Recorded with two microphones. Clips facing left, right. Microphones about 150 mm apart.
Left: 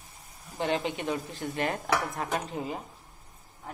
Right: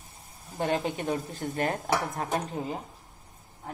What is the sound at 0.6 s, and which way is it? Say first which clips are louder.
Speech: right 1 dB; 45° right (ahead or behind).